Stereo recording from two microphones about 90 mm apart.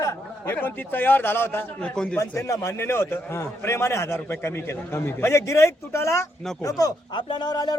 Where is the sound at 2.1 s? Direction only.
35° left (ahead or behind).